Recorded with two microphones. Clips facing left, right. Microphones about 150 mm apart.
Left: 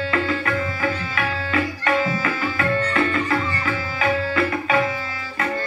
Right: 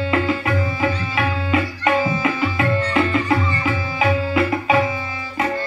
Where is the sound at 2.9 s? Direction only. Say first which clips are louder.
Right 3 dB; 20° right (ahead or behind).